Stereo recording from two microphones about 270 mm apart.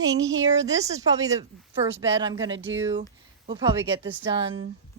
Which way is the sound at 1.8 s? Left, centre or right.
Right.